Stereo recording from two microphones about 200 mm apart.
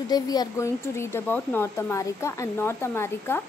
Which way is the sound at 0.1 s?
20° left (ahead or behind).